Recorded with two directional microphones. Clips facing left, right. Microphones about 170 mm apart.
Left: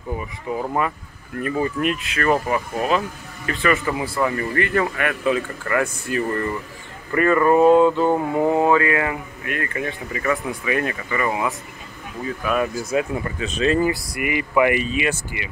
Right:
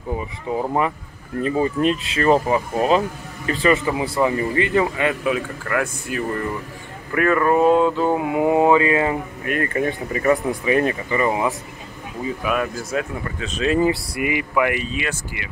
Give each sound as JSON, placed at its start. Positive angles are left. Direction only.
{"t": 0.5, "sound": "speech", "side_deg": -20}
{"t": 5.2, "sound": "speech", "side_deg": -5}
{"t": 7.1, "sound": "a sound", "side_deg": 0}
{"t": 10.5, "sound": "speech", "side_deg": -30}
{"t": 12.2, "sound": "a sound", "side_deg": -15}
{"t": 12.9, "sound": "speech", "side_deg": 5}
{"t": 13.7, "sound": "speech", "side_deg": -20}
{"t": 14.5, "sound": "speech", "side_deg": 5}